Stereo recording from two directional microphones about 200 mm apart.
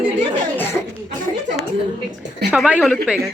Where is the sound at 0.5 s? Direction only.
10° left (ahead or behind).